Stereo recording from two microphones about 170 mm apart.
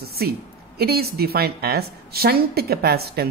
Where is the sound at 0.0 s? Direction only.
65° right (ahead or behind).